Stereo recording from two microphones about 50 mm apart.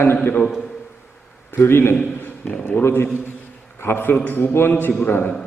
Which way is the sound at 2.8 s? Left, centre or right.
Left.